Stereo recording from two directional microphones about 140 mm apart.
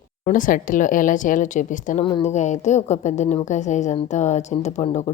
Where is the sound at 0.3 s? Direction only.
75° left (ahead or behind).